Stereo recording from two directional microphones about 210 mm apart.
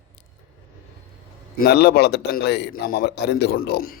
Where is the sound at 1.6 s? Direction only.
50° left (ahead or behind).